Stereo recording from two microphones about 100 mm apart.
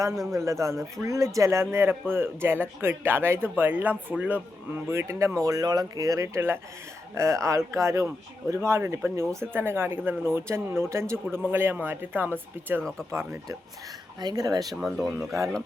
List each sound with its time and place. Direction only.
0.3 s speech: 30° right (ahead or behind)
4.9 s speech: 30° right (ahead or behind)
14.2 s speech: 40° right (ahead or behind)
14.8 s speech: centre (ahead or behind)